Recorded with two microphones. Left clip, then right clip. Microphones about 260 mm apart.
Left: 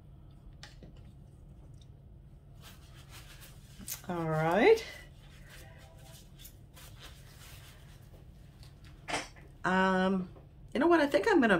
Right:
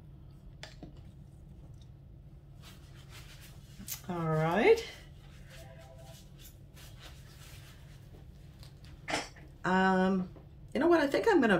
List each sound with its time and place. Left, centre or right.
3.8 s speech: centre
9.6 s a sound: centre
10.7 s a woman's voice: centre